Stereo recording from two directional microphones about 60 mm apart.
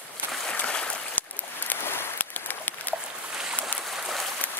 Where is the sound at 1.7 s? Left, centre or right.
Left.